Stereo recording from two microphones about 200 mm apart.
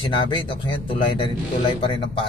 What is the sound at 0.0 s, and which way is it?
Speech, 25° left (ahead or behind).